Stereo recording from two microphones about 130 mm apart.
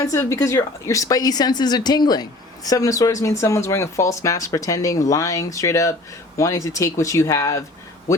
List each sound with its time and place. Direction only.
0.0 s speech: 25° left (ahead or behind)